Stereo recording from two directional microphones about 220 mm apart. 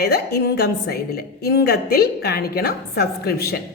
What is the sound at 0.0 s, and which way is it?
A woman's voice, 45° left (ahead or behind).